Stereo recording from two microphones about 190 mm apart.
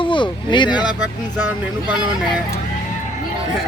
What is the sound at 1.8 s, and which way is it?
Speech, 5° right (ahead or behind).